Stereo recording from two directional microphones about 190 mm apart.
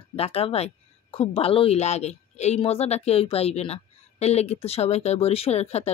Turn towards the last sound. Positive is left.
turn(degrees=35)  # may be behind; listen again after turning